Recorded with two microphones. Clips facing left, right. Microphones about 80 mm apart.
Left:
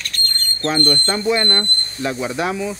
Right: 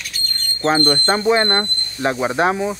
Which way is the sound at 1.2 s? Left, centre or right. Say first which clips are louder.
Right 2 dB; right.